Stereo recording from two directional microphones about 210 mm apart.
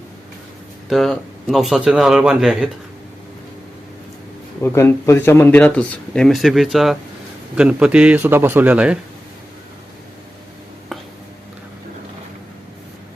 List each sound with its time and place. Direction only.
0.9 s speech: centre (ahead or behind)
4.6 s a man's voice: 10° left (ahead or behind); by 9.0 s 5° right (ahead or behind)